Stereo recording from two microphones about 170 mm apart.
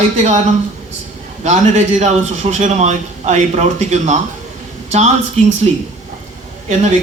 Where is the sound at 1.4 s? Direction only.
40° right (ahead or behind).